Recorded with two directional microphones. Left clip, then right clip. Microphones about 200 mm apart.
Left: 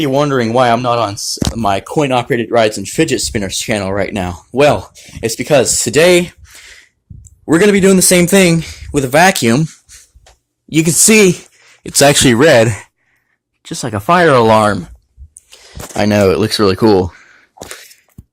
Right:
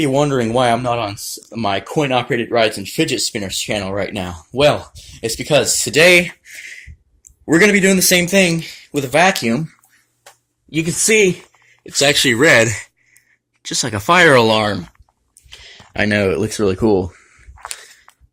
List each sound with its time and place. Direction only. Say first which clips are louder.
0.0 s speech: left 3 dB; 10° left (ahead or behind); by 6.3 s 30° left (ahead or behind)
7.4 s speech: left 2 dB; 20° left (ahead or behind)
7.8 s speech: left 4 dB; 35° left (ahead or behind)
8.3 s speech: left 4 dB; 50° left (ahead or behind)
10.7 s speech: left 5 dB; 50° left (ahead or behind)
12.4 s speech: left 3 dB; 20° left (ahead or behind)
14.5 s speech: left 6 dB; 30° left (ahead or behind)
15.4 s a sound: right 1 dB; 30° left (ahead or behind)
16.0 s speech: left 5 dB; 15° left (ahead or behind)